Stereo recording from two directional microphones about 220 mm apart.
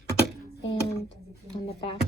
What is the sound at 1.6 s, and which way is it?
Speech, 25° left (ahead or behind).